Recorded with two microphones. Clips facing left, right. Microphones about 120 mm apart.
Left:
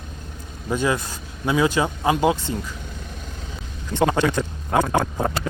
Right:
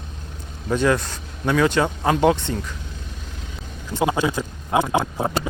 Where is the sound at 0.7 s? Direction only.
10° left (ahead or behind).